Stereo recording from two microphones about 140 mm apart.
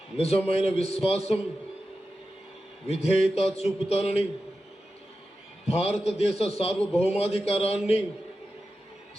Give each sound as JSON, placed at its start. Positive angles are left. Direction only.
{"t": 0.2, "sound": "a man's voice", "side_deg": 45}
{"t": 2.8, "sound": "a man's voice", "side_deg": 45}
{"t": 5.6, "sound": "a man's voice", "side_deg": 45}